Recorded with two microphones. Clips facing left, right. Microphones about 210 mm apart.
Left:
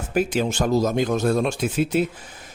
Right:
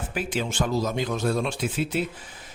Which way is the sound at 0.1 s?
45° left (ahead or behind).